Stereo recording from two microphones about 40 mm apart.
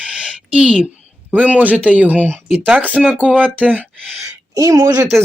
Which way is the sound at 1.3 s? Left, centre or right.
Right.